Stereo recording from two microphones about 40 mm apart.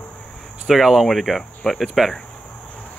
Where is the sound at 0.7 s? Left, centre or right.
Centre.